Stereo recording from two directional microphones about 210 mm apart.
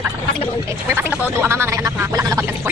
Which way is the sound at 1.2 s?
10° right (ahead or behind).